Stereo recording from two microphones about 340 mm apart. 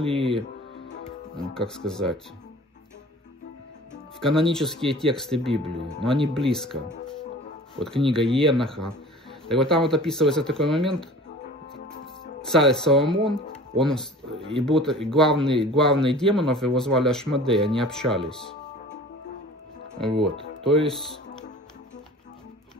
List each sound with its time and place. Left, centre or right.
0.0 s speech: centre
1.4 s speech: centre
4.2 s speech: centre
7.8 s speech: centre
12.4 s speech: centre
20.0 s speech: centre